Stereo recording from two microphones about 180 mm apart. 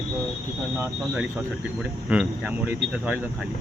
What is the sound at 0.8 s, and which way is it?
Speech, 5° right (ahead or behind).